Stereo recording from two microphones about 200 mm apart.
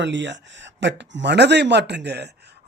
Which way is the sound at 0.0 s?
60° right (ahead or behind).